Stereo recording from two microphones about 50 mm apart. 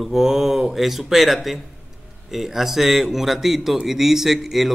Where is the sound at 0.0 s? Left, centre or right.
Centre.